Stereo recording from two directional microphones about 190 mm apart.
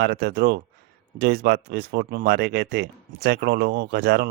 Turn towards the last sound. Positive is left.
turn(degrees=-60)  # may be behind; listen again after turning